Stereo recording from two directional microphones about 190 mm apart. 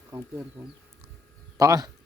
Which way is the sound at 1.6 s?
15° right (ahead or behind).